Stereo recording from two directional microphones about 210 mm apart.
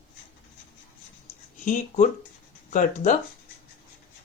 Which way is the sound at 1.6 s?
40° left (ahead or behind).